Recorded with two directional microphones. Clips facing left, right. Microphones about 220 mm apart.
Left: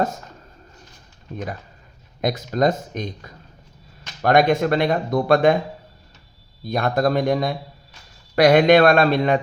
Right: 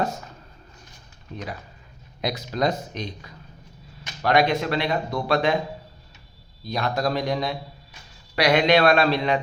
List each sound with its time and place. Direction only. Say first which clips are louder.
1.3 s speech: left 4 dB; 50° left (ahead or behind)
6.7 s speech: left 5 dB; 55° left (ahead or behind)